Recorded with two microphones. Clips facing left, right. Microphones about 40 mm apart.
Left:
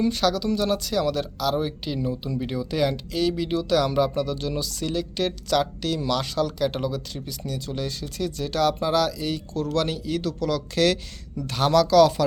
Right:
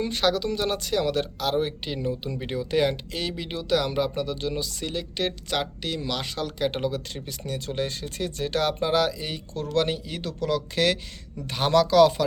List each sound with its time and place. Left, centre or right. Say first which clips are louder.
0.1 s speech: left 1 dB; right